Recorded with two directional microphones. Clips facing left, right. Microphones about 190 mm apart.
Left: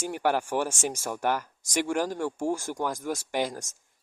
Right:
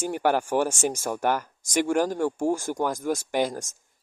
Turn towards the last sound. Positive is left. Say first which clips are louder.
# right 4 dB
turn(degrees=-50)  # may be behind; listen again after turning